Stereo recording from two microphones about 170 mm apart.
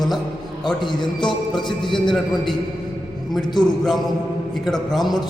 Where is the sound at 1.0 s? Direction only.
25° left (ahead or behind).